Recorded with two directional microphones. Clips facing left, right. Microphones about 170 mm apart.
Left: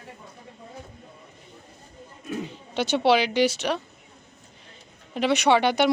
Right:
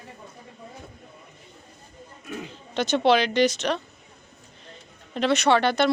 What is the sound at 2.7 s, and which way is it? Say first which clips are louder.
Speech: even; 10° left (ahead or behind).